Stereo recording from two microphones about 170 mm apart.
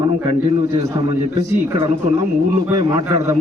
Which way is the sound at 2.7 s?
20° right (ahead or behind).